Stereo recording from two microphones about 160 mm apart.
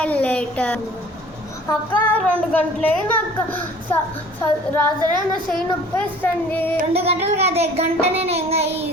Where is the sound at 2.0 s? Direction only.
10° left (ahead or behind).